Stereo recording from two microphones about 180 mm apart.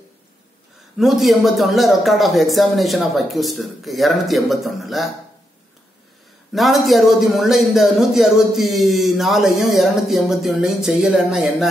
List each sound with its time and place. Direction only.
0.9 s a man's voice: centre (ahead or behind)
6.5 s a man's voice: centre (ahead or behind)